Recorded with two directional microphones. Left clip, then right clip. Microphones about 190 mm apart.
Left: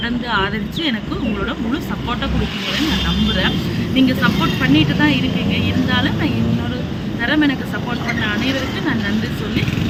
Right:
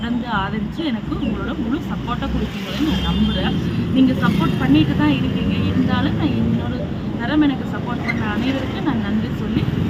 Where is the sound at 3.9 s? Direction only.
15° left (ahead or behind).